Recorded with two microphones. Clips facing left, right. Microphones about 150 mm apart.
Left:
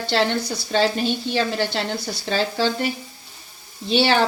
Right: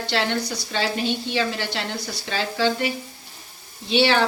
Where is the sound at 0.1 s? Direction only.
35° left (ahead or behind).